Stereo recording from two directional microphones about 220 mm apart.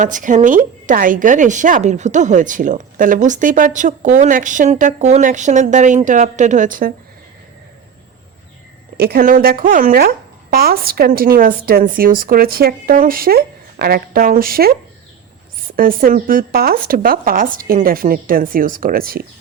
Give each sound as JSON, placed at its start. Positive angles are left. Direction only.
{"t": 0.0, "sound": "speech", "side_deg": -35}
{"t": 9.0, "sound": "speech", "side_deg": -45}